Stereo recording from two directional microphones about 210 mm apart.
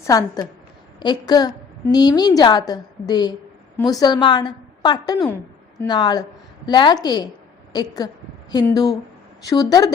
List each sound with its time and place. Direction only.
0.1 s a woman's voice: 15° left (ahead or behind)